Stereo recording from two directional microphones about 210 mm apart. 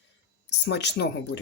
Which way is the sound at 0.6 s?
55° left (ahead or behind).